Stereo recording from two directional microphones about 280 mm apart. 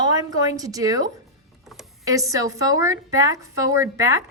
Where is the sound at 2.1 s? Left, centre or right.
Centre.